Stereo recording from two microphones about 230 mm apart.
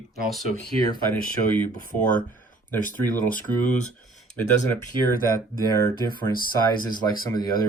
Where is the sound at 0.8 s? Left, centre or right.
Centre.